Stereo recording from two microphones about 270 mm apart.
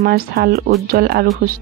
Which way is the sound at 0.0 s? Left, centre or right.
Right.